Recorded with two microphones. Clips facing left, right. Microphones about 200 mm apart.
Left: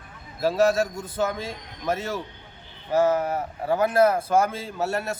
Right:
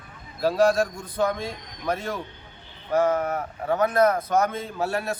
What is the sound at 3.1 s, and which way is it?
Speech, 30° left (ahead or behind).